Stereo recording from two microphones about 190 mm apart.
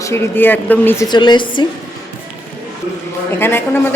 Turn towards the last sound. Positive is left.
turn(degrees=10)  # may be behind; listen again after turning